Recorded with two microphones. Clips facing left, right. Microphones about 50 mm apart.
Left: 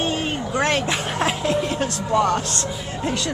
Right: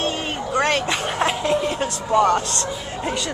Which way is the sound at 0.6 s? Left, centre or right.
Centre.